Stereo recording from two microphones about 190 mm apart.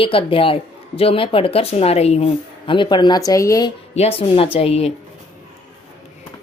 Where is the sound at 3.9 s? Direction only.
30° left (ahead or behind).